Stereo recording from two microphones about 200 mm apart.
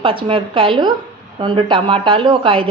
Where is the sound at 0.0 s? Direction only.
25° right (ahead or behind).